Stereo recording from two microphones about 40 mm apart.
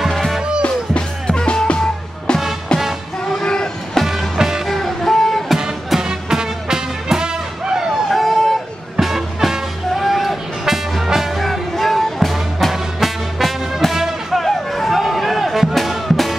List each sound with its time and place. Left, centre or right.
0.1 s music: centre
0.7 s music: left
3.3 s vehicle: centre
4.0 s music: centre
4.6 s a sound: centre
6.0 s music: centre
8.1 s vehicle: centre
9.0 s music: centre